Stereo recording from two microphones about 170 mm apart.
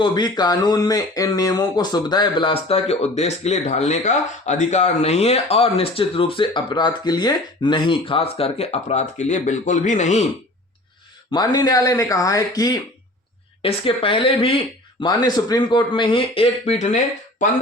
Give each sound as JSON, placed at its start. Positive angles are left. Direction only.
{"t": 0.0, "sound": "speech", "side_deg": 25}
{"t": 11.3, "sound": "speech", "side_deg": 25}
{"t": 13.6, "sound": "speech", "side_deg": 35}